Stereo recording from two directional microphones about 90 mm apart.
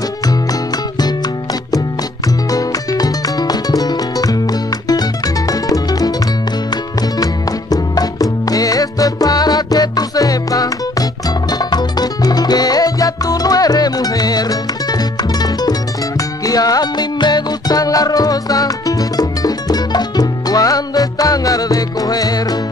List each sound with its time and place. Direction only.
0.3 s music: 45° left (ahead or behind)